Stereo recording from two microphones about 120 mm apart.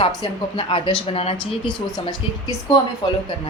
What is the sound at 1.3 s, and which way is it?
A woman's voice, 40° left (ahead or behind).